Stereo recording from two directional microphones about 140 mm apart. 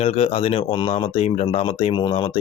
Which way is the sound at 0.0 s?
45° left (ahead or behind).